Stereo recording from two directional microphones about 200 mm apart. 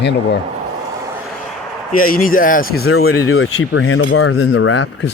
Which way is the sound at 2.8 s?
90° left.